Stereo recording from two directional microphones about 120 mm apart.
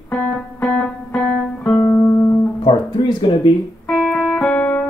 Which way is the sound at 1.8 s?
25° left (ahead or behind).